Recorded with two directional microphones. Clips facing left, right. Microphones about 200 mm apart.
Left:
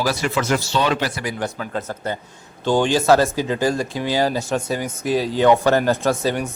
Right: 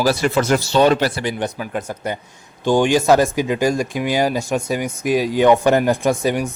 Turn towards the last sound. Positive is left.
turn(degrees=-15)  # may be behind; listen again after turning